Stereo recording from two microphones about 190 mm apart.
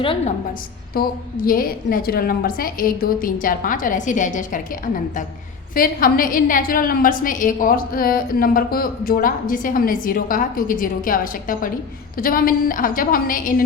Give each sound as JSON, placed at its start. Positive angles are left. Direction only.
{"t": 0.0, "sound": "a woman's voice", "side_deg": 25}
{"t": 0.9, "sound": "a woman's voice", "side_deg": 50}